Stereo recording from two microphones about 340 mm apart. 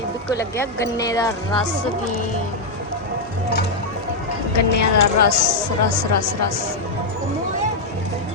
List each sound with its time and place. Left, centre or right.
0.3 s speech: centre
4.5 s speech: left
5.4 s speech: right